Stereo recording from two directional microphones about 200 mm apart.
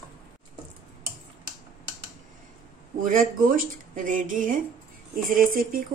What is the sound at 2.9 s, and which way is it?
Speech, 45° right (ahead or behind).